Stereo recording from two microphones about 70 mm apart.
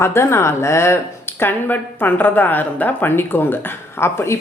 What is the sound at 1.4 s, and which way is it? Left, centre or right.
A woman's voice, left.